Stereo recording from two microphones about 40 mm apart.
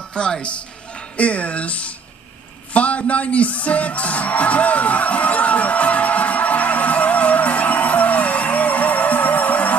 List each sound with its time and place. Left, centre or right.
0.1 s a man's voice: left
2.7 s music: left